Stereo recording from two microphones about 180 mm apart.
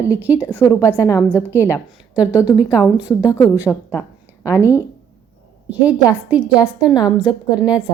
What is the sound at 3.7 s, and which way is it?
Speech, 15° left (ahead or behind).